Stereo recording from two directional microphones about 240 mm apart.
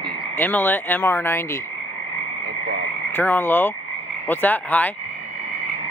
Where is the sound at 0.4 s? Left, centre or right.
Centre.